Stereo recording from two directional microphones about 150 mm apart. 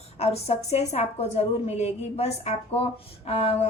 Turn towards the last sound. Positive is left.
turn(degrees=40)  # may be behind; listen again after turning